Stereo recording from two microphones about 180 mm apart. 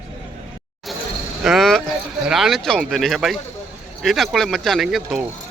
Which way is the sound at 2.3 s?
Centre (ahead or behind).